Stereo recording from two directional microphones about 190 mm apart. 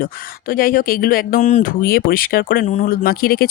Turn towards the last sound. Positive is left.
turn(degrees=50)  # may be behind; listen again after turning